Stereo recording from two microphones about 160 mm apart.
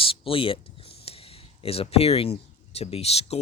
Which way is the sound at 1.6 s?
35° left (ahead or behind).